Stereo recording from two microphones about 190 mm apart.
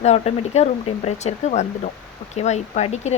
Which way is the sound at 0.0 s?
35° left (ahead or behind).